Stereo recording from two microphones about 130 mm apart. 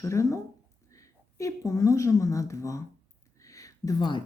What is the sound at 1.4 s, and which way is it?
Speech, 25° left (ahead or behind).